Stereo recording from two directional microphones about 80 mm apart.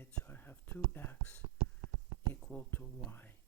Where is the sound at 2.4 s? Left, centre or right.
Left.